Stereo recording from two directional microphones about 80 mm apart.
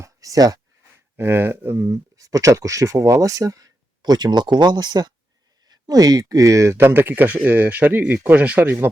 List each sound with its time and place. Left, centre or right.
0.0 s a sound: right
1.1 s speech: right
1.9 s speech: right